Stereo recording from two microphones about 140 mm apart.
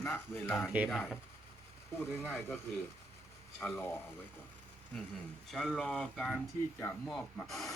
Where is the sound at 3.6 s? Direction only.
15° left (ahead or behind).